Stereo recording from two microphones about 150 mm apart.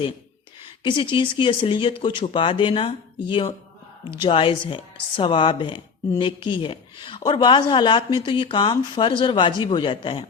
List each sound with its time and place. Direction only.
0.9 s speech: 35° left (ahead or behind)